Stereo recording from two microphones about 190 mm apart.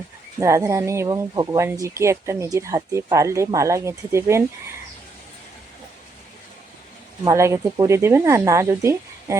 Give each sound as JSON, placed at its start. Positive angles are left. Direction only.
{"t": 0.3, "sound": "speech", "side_deg": -15}
{"t": 7.3, "sound": "speech", "side_deg": -15}